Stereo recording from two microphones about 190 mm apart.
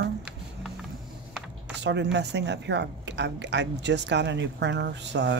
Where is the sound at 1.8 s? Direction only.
65° right (ahead or behind).